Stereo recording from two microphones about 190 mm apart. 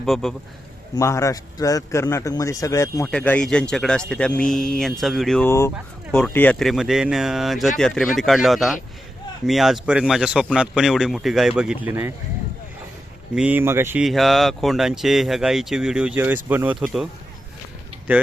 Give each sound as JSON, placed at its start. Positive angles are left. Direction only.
{"t": 0.0, "sound": "speech", "side_deg": 0}
{"t": 0.9, "sound": "a man's voice", "side_deg": 15}
{"t": 3.1, "sound": "speech", "side_deg": 5}
{"t": 5.5, "sound": "a man's voice", "side_deg": 15}
{"t": 5.7, "sound": "speech", "side_deg": 5}
{"t": 13.3, "sound": "speech", "side_deg": -5}
{"t": 14.0, "sound": "speech", "side_deg": 0}
{"t": 18.1, "sound": "speech", "side_deg": -10}